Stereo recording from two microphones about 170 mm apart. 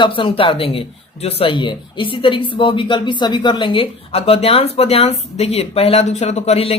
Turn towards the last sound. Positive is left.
turn(degrees=35)  # may be behind; listen again after turning